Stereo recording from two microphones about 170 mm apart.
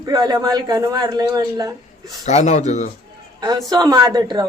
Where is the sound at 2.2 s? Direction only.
45° left (ahead or behind).